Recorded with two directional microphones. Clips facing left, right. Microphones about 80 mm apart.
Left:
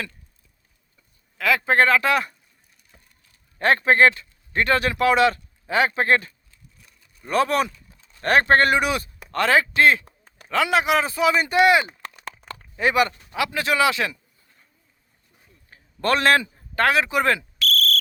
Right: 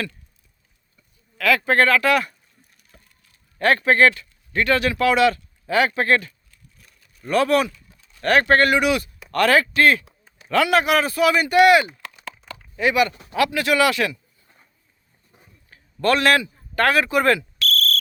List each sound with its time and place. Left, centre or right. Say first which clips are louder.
1.4 s speech: right 1 dB; left
3.6 s speech: even; left
9.3 s speech: right 2 dB; left
12.8 s speech: right 1 dB; left
13.5 s speech: left 1 dB; left
15.7 s a sound: right 2 dB; left
16.8 s speech: right 2 dB; centre
17.6 s cricket: even; centre